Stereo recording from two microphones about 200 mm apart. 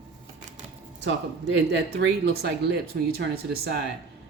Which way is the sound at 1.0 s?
65° right (ahead or behind).